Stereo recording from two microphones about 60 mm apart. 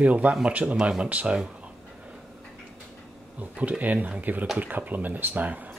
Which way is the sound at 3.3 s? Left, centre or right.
Right.